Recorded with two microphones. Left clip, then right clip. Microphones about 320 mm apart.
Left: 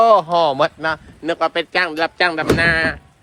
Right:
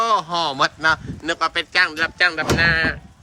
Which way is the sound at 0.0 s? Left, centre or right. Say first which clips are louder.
Left 7 dB; centre.